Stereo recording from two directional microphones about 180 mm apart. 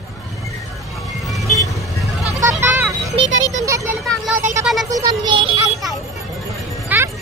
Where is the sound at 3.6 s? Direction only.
15° right (ahead or behind).